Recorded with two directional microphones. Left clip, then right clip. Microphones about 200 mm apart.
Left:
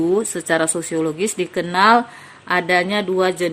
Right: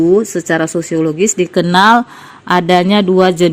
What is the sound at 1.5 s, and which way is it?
A woman's voice, 35° right (ahead or behind).